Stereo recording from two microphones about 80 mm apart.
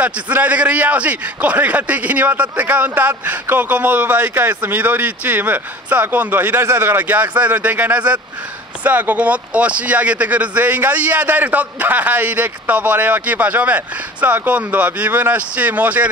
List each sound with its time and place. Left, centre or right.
0.0 s speech: centre